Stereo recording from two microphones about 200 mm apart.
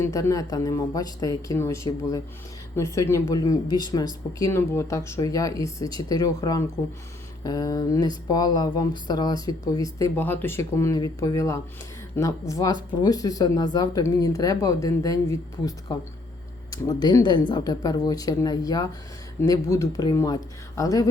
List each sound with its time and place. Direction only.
0.0 s speech: 15° left (ahead or behind)